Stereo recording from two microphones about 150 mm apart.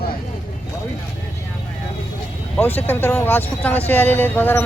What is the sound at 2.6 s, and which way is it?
Speech, 10° left (ahead or behind).